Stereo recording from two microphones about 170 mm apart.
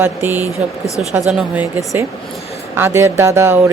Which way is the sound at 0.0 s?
10° right (ahead or behind).